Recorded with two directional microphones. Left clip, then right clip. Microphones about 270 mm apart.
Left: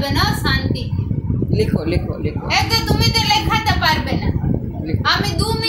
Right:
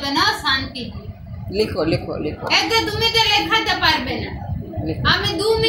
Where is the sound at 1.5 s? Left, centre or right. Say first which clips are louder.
Right 2 dB; centre.